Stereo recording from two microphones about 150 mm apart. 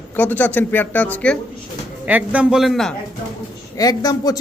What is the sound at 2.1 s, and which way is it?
Speech, 10° right (ahead or behind).